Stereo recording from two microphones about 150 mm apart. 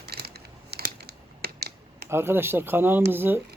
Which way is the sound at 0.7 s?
90° right.